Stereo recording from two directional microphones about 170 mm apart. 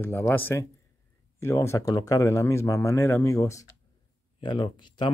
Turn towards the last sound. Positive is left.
turn(degrees=30)  # may be behind; listen again after turning